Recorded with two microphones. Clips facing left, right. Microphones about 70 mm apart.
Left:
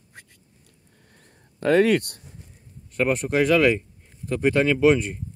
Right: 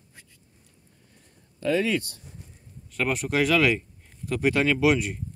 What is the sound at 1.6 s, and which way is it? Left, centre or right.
Speech, left.